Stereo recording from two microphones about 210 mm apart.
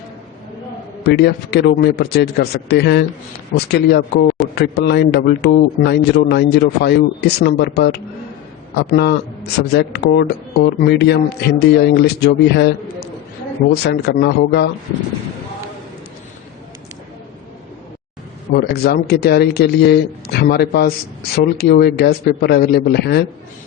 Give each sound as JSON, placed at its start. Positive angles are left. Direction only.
{"t": 1.0, "sound": "speech", "side_deg": 50}
{"t": 18.5, "sound": "speech", "side_deg": 50}